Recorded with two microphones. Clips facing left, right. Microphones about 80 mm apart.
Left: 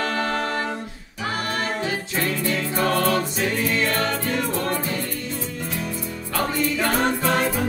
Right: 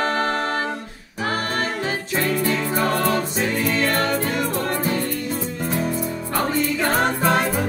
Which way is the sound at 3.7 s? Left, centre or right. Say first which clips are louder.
Right 2 dB; right.